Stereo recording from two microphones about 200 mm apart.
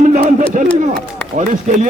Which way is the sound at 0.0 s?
40° right (ahead or behind).